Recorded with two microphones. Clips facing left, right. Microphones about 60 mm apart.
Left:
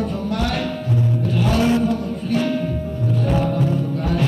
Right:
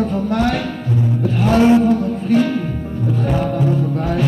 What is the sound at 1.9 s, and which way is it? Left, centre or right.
Music, right.